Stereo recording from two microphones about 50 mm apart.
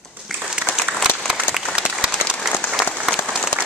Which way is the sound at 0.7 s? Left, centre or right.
Left.